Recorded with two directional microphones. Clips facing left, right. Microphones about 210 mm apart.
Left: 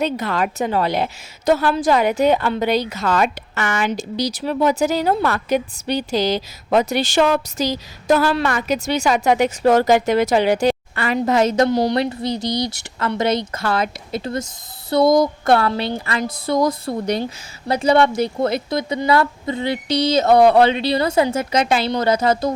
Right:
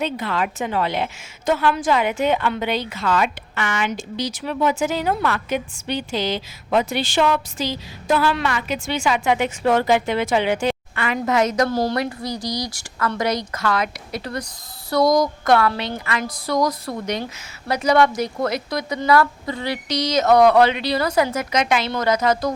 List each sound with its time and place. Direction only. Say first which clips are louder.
0.0 s a woman's voice: left 3 dB; 45° left (ahead or behind); by 22.5 s 25° left (ahead or behind)